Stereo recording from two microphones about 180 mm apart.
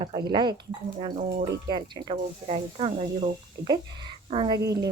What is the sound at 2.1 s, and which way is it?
Speech, 35° right (ahead or behind).